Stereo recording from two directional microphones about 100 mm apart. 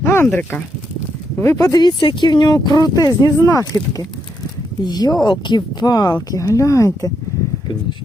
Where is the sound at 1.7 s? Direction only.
45° left (ahead or behind).